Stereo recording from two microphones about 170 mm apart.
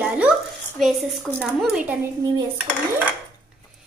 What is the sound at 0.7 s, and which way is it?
A woman's voice, centre (ahead or behind).